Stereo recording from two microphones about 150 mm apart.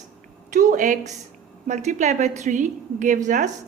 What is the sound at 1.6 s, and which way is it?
A woman's voice, 50° right (ahead or behind).